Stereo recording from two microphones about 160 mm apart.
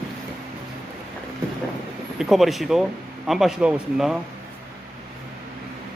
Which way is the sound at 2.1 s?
Centre (ahead or behind).